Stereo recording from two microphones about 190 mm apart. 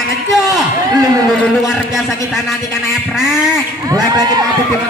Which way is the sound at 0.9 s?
20° right (ahead or behind).